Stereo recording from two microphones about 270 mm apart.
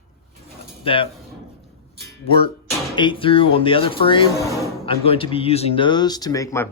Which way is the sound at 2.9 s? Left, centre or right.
Centre.